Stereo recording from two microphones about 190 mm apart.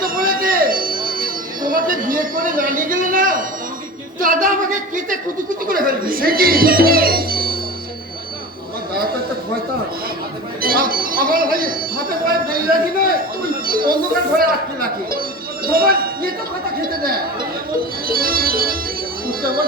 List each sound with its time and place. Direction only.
0.0 s a sound: 50° right (ahead or behind)
4.2 s speech: 45° right (ahead or behind)
10.6 s speech: 50° right (ahead or behind)
18.1 s music: 50° right (ahead or behind)